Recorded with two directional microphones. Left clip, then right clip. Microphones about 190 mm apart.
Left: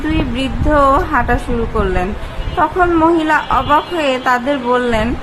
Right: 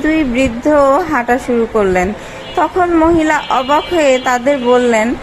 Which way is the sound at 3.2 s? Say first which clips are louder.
Right 1 dB; 20° right (ahead or behind).